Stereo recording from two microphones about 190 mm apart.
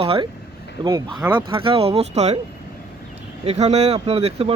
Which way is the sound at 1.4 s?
25° right (ahead or behind).